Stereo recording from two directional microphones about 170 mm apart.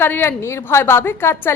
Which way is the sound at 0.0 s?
15° left (ahead or behind).